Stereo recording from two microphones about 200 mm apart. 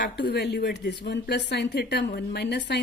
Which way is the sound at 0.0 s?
55° left (ahead or behind).